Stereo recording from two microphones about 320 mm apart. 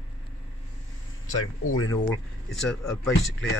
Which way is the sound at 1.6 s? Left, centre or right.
Left.